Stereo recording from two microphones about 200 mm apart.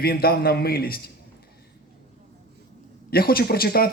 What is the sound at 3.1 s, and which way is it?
Speech, 50° left (ahead or behind).